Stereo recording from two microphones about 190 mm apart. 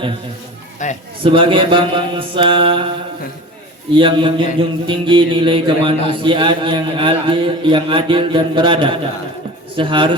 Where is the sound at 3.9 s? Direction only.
25° right (ahead or behind).